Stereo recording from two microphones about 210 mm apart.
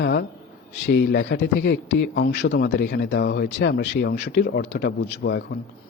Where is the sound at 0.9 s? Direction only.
55° left (ahead or behind).